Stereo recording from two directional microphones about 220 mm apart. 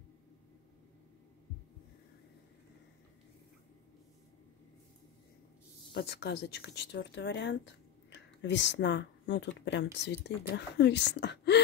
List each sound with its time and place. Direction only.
5.9 s speech: 50° left (ahead or behind)